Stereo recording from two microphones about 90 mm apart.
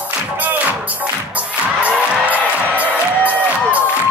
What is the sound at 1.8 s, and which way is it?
Music, 15° right (ahead or behind).